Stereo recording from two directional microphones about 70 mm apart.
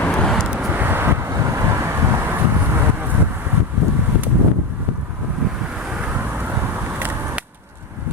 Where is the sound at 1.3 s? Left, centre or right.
Right.